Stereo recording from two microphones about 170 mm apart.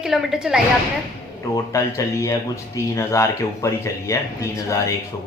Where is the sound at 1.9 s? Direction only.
20° left (ahead or behind).